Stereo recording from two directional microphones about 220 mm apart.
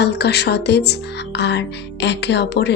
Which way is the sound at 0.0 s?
50° left (ahead or behind).